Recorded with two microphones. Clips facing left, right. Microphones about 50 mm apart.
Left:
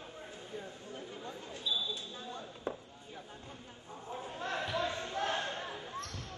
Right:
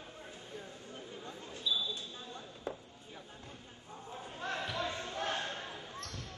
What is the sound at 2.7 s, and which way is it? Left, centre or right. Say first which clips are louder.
Chop: left 2 dB; left.